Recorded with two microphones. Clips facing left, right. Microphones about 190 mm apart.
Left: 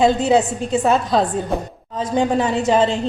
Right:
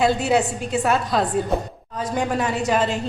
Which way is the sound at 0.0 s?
20° left (ahead or behind).